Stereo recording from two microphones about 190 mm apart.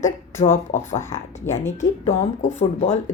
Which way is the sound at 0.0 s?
40° left (ahead or behind).